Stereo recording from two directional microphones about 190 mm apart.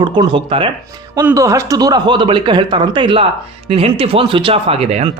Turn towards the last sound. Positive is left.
turn(degrees=-30)  # may be behind; listen again after turning